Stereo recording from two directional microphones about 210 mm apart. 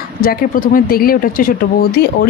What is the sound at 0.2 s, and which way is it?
Speech, 45° left (ahead or behind).